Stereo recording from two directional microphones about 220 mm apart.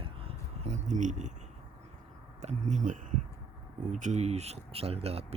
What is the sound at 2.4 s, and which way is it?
Speech, 35° right (ahead or behind).